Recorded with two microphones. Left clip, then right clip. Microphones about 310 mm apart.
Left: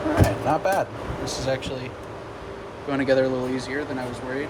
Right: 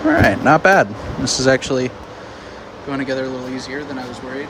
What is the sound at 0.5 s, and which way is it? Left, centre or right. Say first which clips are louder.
Speech: right 11 dB; right.